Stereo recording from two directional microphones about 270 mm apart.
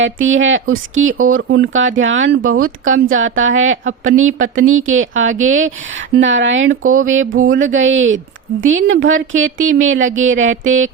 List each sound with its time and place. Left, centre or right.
0.0 s a woman's voice: right
2.6 s a woman's voice: right
2.9 s a woman's voice: right
7.3 s a woman's voice: right
7.6 s a woman's voice: right